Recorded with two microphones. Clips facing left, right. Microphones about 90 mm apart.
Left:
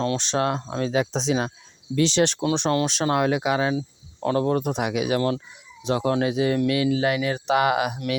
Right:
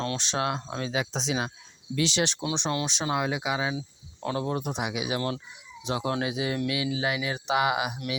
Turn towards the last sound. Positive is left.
turn(degrees=50)  # may be behind; listen again after turning